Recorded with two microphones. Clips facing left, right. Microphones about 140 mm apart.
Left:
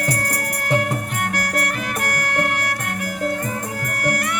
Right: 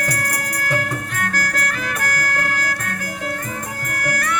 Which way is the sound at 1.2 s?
20° left (ahead or behind).